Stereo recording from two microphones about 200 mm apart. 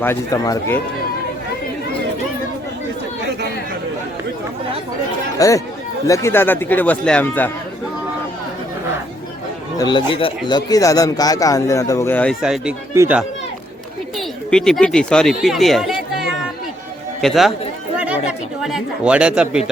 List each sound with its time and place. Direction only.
0.0 s speech: 15° left (ahead or behind)
5.4 s speech: 15° left (ahead or behind)
9.7 s speech: 20° left (ahead or behind); by 13.2 s 10° right (ahead or behind)
14.2 s speech: 5° left (ahead or behind)
17.2 s speech: centre (ahead or behind)
17.9 s chatter: 5° right (ahead or behind)
18.6 s speech: 5° right (ahead or behind)